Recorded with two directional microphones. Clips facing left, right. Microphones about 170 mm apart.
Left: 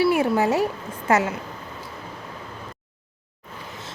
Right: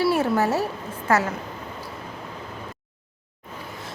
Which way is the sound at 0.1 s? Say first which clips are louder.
Left 1 dB; 15° left (ahead or behind).